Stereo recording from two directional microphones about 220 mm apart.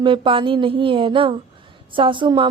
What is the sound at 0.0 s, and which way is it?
Speech, 25° right (ahead or behind).